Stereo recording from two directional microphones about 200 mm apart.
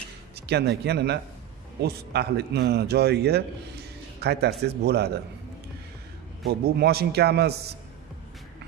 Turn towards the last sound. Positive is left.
turn(degrees=-55)  # may be behind; listen again after turning